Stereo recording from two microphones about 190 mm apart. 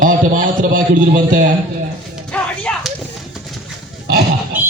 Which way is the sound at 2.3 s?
5° left (ahead or behind).